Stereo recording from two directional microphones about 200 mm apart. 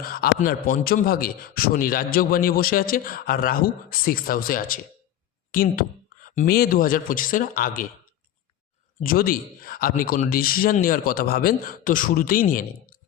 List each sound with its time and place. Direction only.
0.0 s a man's voice: 45° left (ahead or behind)
9.0 s a man's voice: 45° left (ahead or behind)